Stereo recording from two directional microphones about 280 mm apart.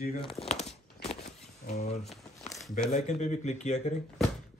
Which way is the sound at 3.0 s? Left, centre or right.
Left.